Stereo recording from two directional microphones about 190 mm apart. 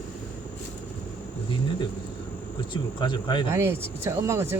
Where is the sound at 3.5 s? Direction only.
15° right (ahead or behind).